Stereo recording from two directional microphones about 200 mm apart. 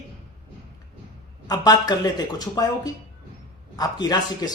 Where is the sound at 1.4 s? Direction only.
20° left (ahead or behind).